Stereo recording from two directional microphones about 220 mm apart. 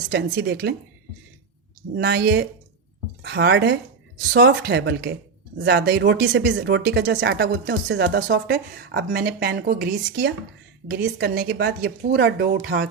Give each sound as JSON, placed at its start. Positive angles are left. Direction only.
{"t": 0.1, "sound": "speech", "side_deg": -50}
{"t": 2.0, "sound": "speech", "side_deg": -50}